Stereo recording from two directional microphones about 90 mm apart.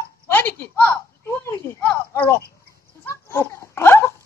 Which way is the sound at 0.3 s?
25° left (ahead or behind).